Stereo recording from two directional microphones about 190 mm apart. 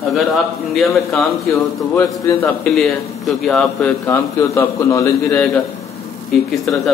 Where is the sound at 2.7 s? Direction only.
Centre (ahead or behind).